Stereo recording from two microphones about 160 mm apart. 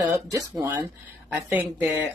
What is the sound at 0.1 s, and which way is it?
Speech, 20° right (ahead or behind).